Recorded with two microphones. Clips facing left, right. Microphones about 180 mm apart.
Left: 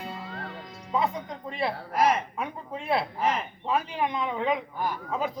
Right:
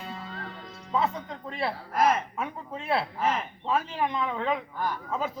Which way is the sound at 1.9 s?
10° left (ahead or behind).